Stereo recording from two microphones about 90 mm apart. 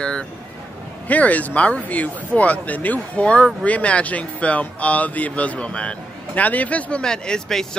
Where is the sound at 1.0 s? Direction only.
15° left (ahead or behind).